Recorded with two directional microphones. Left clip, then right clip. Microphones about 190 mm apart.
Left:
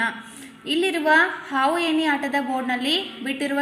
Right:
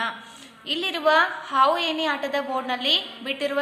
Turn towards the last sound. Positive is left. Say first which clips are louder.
# even
turn(degrees=10)  # may be behind; listen again after turning